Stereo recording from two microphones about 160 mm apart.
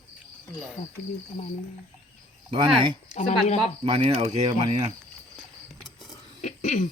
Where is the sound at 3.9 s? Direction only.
35° right (ahead or behind).